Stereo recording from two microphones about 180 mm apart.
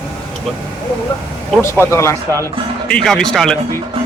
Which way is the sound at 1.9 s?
15° left (ahead or behind).